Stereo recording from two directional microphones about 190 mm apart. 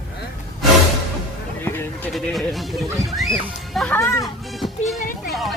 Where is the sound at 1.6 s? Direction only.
10° left (ahead or behind).